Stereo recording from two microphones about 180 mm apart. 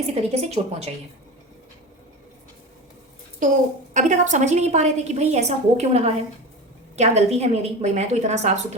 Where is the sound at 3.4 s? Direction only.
45° right (ahead or behind).